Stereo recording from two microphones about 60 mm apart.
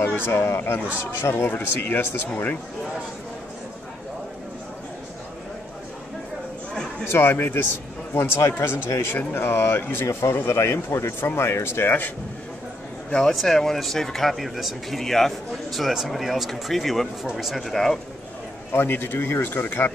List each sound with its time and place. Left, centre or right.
0.0 s speech: left
7.1 s speech: left
8.6 s speech: left
13.1 s speech: centre
18.7 s speech: left